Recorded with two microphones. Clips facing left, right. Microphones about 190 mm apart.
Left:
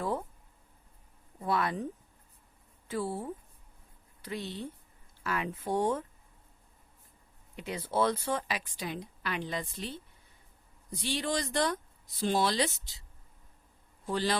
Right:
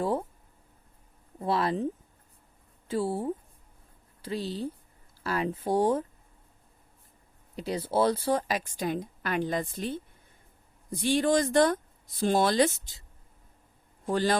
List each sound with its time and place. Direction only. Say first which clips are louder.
0.0 s a sound: right 5 dB; 30° right (ahead or behind)
1.4 s speech: right 4 dB; 30° right (ahead or behind)
7.5 s speech: right 5 dB; 35° right (ahead or behind); by 12.9 s 50° right (ahead or behind)
14.0 s a man's voice: right 5 dB; 45° right (ahead or behind)